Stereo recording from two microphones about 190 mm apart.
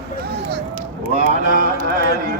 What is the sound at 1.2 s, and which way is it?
Speech, 45° right (ahead or behind).